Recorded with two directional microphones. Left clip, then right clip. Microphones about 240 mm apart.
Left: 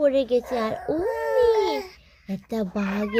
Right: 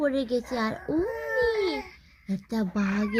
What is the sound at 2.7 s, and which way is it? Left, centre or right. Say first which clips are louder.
Child singing: left 2 dB; left.